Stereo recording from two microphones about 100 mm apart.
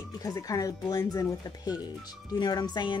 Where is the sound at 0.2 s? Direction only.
35° left (ahead or behind).